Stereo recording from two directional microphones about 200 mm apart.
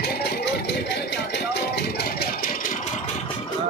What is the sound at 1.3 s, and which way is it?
Rattle, 55° left (ahead or behind).